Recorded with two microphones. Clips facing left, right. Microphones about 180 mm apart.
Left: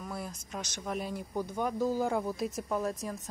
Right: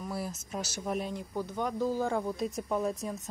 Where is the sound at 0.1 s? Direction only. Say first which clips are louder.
Right 4 dB; 5° right (ahead or behind).